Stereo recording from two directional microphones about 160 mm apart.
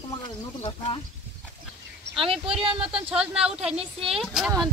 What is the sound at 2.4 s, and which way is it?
Speech, 35° right (ahead or behind).